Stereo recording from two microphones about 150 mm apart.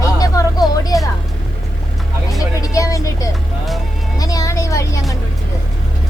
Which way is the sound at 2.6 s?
20° left (ahead or behind).